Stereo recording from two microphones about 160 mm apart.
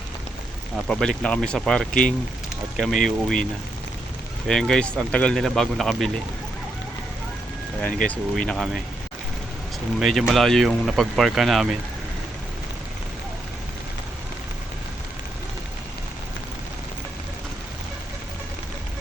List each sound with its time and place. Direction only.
0.9 s speech: 5° left (ahead or behind)
4.4 s speech: 5° left (ahead or behind)
7.8 s speech: 10° left (ahead or behind)
10.0 s speech: centre (ahead or behind)